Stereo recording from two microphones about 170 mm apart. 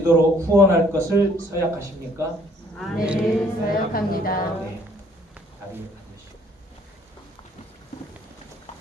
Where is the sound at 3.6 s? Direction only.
60° left (ahead or behind).